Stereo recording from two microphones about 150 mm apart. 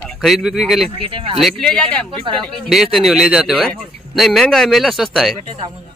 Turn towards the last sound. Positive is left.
turn(degrees=0)  # may be behind; listen again after turning